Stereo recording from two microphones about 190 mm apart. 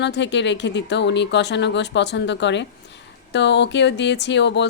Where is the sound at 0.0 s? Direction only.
65° left (ahead or behind).